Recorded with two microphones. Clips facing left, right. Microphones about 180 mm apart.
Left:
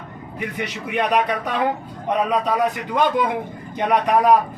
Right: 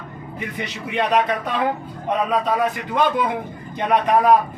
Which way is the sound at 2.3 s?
15° left (ahead or behind).